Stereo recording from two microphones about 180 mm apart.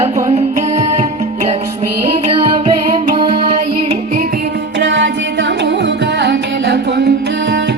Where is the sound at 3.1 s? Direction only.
30° right (ahead or behind).